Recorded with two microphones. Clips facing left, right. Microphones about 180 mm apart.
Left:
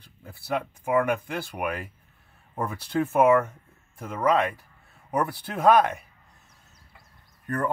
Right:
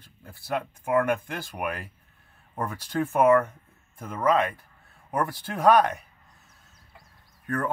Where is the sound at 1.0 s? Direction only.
10° left (ahead or behind).